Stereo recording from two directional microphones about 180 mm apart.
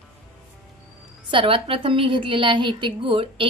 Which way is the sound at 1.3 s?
30° right (ahead or behind).